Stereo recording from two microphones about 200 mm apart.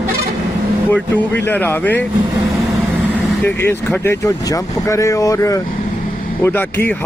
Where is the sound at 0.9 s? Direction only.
10° left (ahead or behind).